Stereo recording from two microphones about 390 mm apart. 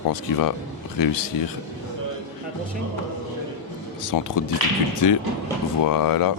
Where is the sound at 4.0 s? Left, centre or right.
Left.